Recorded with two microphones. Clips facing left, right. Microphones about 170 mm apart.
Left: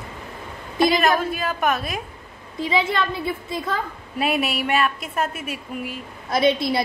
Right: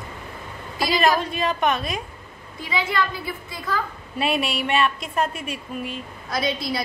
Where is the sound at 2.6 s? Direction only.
25° left (ahead or behind).